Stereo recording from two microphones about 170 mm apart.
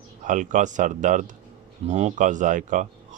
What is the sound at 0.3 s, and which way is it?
Speech, 50° right (ahead or behind).